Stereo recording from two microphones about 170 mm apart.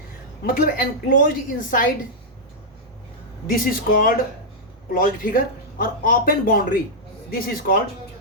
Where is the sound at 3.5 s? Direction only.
55° left (ahead or behind).